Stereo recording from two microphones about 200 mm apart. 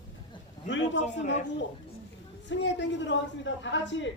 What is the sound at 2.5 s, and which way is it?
A man's voice, 65° left (ahead or behind).